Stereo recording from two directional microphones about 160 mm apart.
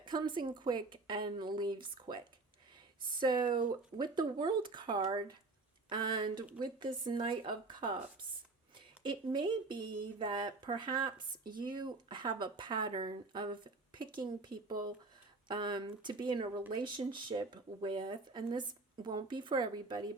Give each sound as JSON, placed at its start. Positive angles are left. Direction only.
{"t": 0.0, "sound": "speech", "side_deg": -30}
{"t": 9.0, "sound": "speech", "side_deg": -30}